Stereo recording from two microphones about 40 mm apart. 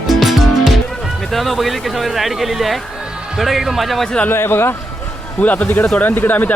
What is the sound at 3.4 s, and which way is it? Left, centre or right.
Music, centre.